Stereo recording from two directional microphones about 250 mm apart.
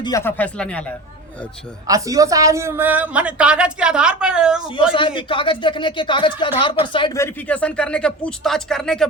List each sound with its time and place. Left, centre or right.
0.0 s a woman's voice: centre
1.9 s a woman's voice: centre
4.9 s a woman's voice: centre